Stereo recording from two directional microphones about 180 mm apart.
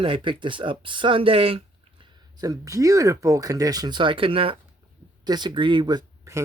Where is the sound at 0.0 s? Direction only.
30° right (ahead or behind).